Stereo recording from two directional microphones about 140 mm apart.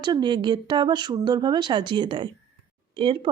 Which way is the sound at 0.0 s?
30° right (ahead or behind).